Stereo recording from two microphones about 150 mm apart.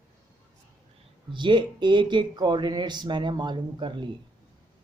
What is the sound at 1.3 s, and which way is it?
Speech, 30° right (ahead or behind).